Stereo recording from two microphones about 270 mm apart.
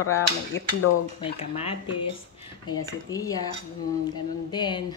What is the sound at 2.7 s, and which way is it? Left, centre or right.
Speech, centre.